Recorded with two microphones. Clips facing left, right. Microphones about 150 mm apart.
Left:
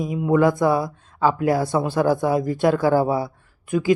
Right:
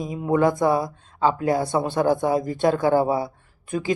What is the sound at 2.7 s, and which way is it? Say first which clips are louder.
Speech: left 1 dB; 20° right (ahead or behind).